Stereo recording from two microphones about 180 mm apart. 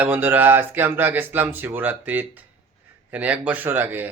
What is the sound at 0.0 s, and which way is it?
Speech, 10° right (ahead or behind).